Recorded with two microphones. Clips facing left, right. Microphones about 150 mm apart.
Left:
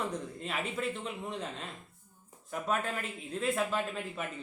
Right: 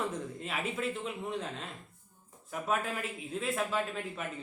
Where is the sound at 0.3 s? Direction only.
Centre (ahead or behind).